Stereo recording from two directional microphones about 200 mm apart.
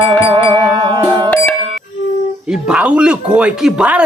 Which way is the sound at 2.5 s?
5° right (ahead or behind).